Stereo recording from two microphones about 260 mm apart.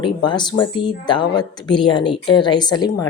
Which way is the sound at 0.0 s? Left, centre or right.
Centre.